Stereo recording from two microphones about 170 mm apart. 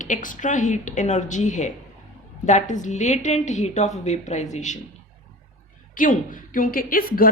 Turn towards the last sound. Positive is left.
turn(degrees=60)  # may be behind; listen again after turning